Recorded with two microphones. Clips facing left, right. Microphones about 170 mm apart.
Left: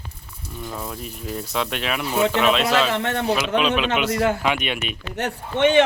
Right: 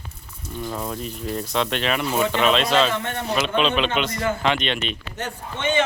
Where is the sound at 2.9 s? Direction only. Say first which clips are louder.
Left 4 dB; 70° left (ahead or behind).